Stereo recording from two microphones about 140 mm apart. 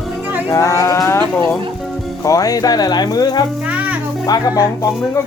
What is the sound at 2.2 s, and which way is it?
Speech, 25° left (ahead or behind).